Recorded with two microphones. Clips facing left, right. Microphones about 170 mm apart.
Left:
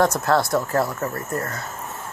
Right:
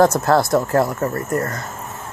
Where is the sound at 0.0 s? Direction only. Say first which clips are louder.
Right 4 dB; 25° right (ahead or behind).